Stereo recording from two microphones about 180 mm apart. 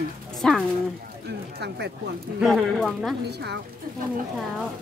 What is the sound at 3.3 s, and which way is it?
Speech, 65° right (ahead or behind).